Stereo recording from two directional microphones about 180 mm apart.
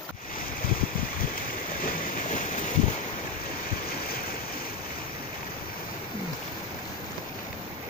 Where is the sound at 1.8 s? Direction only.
45° left (ahead or behind).